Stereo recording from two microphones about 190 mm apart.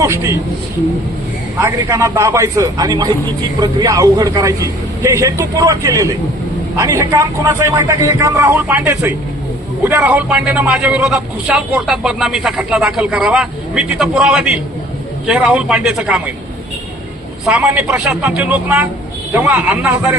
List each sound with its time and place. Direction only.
0.0 s a man's voice: 15° right (ahead or behind)
1.6 s a man's voice: 15° right (ahead or behind)
17.4 s a man's voice: 5° right (ahead or behind)